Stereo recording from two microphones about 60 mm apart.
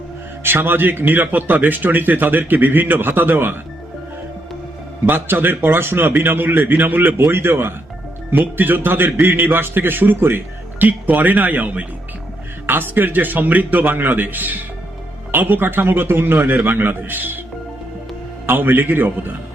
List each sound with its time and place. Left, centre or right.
0.4 s a man's voice: right
5.0 s a man's voice: right
18.4 s a man's voice: right